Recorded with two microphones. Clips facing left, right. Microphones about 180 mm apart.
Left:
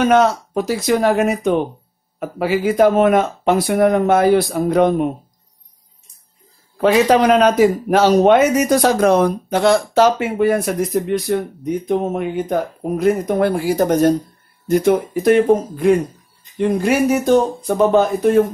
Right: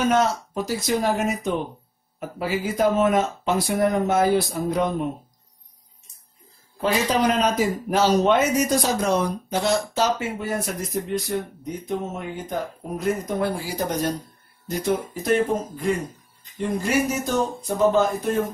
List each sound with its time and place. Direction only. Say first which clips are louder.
0.0 s speech: left 7 dB; 70° left (ahead or behind)
6.8 s speech: left 8 dB; 70° left (ahead or behind); by 14.1 s 50° left (ahead or behind)
14.7 s speech: left 10 dB; 60° left (ahead or behind)